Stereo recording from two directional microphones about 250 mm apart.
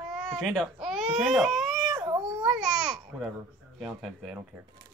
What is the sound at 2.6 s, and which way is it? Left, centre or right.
Speech, centre.